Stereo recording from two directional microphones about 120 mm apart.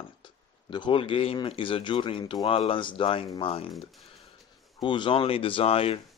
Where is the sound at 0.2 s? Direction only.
40° left (ahead or behind).